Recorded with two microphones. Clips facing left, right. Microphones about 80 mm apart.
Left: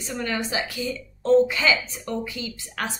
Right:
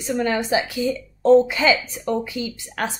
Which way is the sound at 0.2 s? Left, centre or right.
Right.